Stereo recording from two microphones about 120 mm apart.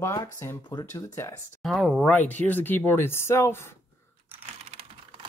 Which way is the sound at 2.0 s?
15° left (ahead or behind).